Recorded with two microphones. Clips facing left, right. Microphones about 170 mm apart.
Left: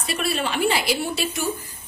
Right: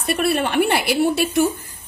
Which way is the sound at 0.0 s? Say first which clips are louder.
Right 6 dB; 55° right (ahead or behind).